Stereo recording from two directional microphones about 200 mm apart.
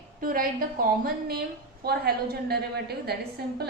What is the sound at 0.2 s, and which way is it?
A woman's voice, 45° right (ahead or behind).